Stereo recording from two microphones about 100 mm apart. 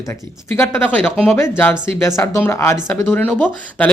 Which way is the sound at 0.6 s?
20° left (ahead or behind).